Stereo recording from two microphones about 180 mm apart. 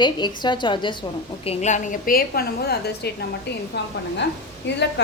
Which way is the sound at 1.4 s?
35° left (ahead or behind).